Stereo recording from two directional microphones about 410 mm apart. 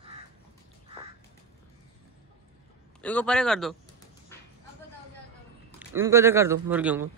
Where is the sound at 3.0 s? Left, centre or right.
Centre.